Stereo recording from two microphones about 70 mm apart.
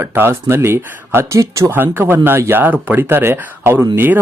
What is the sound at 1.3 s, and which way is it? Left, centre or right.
Speech, right.